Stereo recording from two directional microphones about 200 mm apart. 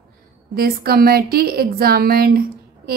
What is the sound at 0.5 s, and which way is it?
A woman's voice, 50° right (ahead or behind).